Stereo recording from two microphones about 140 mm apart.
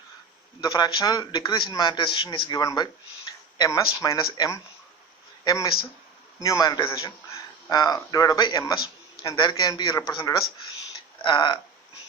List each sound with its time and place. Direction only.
0.6 s a man's voice: 30° left (ahead or behind)